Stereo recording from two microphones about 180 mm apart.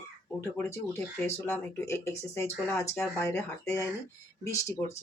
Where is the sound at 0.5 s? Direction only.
15° left (ahead or behind).